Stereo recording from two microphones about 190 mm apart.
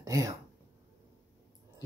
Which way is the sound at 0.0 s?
15° right (ahead or behind).